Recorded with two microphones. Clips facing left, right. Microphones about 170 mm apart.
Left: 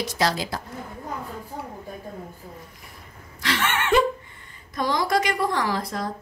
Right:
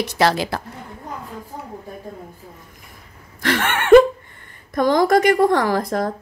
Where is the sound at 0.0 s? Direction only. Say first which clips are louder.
Right 6 dB; 65° right (ahead or behind).